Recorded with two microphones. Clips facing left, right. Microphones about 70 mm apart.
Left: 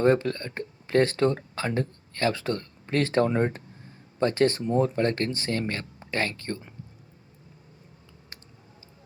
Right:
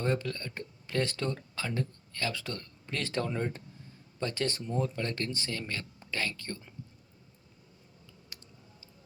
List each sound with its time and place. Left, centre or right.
0.0 s speech: left